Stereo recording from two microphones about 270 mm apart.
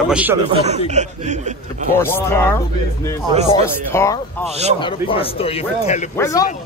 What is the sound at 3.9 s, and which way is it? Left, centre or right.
Speech, centre.